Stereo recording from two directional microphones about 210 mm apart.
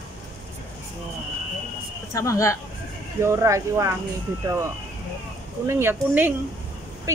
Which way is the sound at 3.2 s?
15° right (ahead or behind).